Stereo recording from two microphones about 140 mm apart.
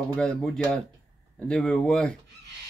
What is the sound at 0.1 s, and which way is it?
Speech, 5° left (ahead or behind).